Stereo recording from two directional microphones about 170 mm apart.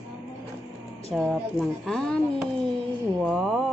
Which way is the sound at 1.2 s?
Centre (ahead or behind).